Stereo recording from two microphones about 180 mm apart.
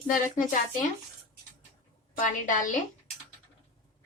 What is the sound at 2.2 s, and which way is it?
Speech, 45° left (ahead or behind).